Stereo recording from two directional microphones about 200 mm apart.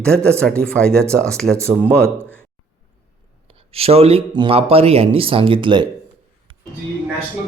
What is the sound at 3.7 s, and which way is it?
Speech, 30° right (ahead or behind).